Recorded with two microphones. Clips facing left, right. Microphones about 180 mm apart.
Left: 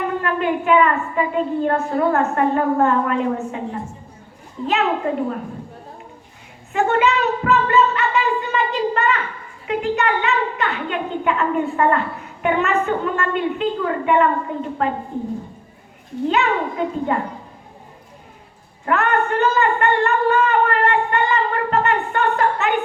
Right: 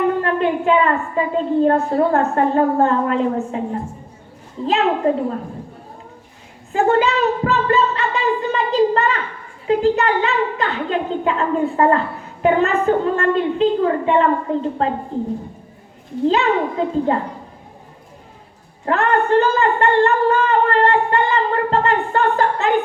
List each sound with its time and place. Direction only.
0.2 s a woman's voice: 30° right (ahead or behind)
4.6 s a woman's voice: 30° right (ahead or behind)
6.7 s a sound: 35° right (ahead or behind)
9.6 s a woman's voice: 35° right (ahead or behind)
16.2 s a woman's voice: 30° right (ahead or behind)
18.9 s a woman's voice: 30° right (ahead or behind)